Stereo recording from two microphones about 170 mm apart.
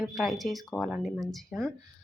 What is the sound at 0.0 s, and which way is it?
Speech, centre (ahead or behind).